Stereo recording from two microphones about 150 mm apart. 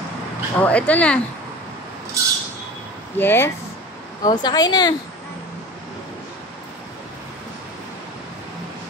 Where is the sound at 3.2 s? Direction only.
15° left (ahead or behind).